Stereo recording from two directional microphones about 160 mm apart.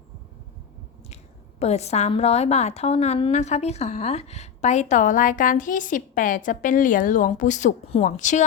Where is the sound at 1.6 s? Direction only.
40° left (ahead or behind).